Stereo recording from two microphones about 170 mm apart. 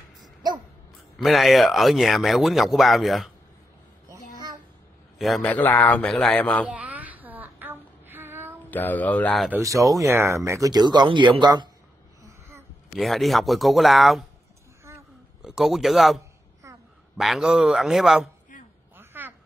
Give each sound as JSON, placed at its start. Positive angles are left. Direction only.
{"t": 1.1, "sound": "a man's voice", "side_deg": 0}
{"t": 5.2, "sound": "a man's voice", "side_deg": 5}
{"t": 6.7, "sound": "child singing", "side_deg": -10}
{"t": 8.6, "sound": "a man's voice", "side_deg": 10}
{"t": 9.5, "sound": "speech", "side_deg": -20}
{"t": 12.2, "sound": "a sound", "side_deg": -15}
{"t": 12.9, "sound": "a man's voice", "side_deg": 0}
{"t": 14.9, "sound": "a sound", "side_deg": -15}
{"t": 15.4, "sound": "a man's voice", "side_deg": 0}
{"t": 16.6, "sound": "a sound", "side_deg": -20}
{"t": 17.2, "sound": "a man's voice", "side_deg": -5}
{"t": 18.9, "sound": "a sound", "side_deg": -10}